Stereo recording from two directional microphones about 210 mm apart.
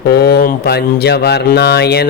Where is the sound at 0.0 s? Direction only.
50° left (ahead or behind).